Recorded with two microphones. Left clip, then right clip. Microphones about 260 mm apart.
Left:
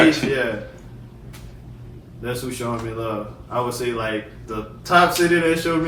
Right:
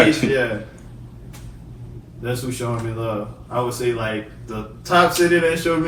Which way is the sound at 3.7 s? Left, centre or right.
Centre.